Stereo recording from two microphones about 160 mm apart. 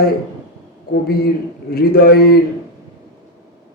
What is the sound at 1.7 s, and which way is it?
Speech, 70° left (ahead or behind).